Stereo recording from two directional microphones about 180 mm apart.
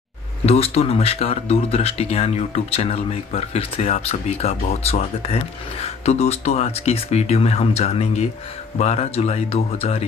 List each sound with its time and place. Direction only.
0.5 s speech: 35° left (ahead or behind)